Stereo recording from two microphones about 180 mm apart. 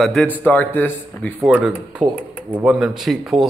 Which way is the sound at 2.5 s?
5° right (ahead or behind).